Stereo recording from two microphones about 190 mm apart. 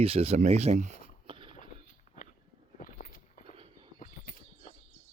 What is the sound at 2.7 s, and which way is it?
Walk, 45° left (ahead or behind).